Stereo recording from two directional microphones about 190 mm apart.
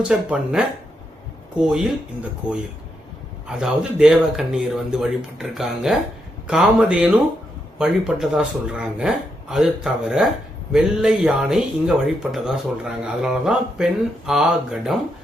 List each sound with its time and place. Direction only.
0.0 s speech: 5° right (ahead or behind)